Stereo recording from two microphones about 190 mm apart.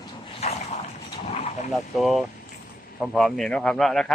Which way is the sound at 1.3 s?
35° left (ahead or behind).